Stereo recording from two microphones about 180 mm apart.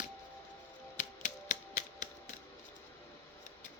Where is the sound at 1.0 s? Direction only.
45° left (ahead or behind).